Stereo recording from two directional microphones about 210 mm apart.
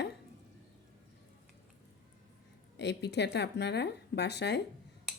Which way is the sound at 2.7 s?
55° left (ahead or behind).